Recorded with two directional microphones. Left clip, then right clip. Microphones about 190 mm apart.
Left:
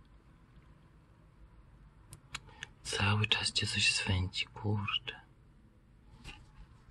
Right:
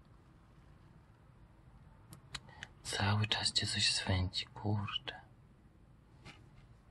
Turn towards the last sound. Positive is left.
turn(degrees=-5)  # may be behind; listen again after turning